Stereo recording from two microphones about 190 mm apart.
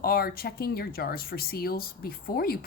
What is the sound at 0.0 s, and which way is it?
Speech, 55° left (ahead or behind).